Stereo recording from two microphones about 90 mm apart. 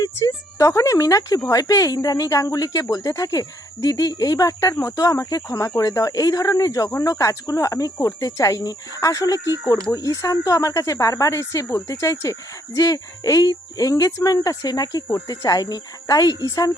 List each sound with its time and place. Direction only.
0.6 s speech: 35° left (ahead or behind)